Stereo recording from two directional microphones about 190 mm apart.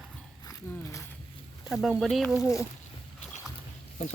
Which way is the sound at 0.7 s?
15° left (ahead or behind).